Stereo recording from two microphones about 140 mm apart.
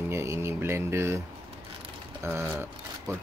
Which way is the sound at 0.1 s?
20° right (ahead or behind).